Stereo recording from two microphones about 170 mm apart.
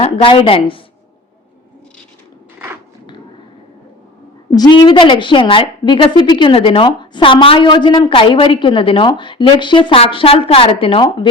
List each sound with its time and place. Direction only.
0.0 s a woman's voice: 30° left (ahead or behind)
4.5 s a woman's voice: 25° left (ahead or behind)